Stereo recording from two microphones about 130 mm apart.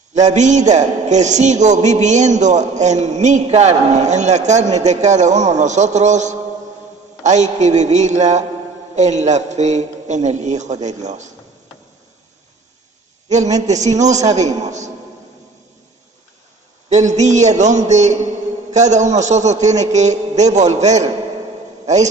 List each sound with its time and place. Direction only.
0.1 s a man's voice: 65° right (ahead or behind)
13.7 s a man's voice: 60° right (ahead or behind)
16.9 s a man's voice: 65° right (ahead or behind)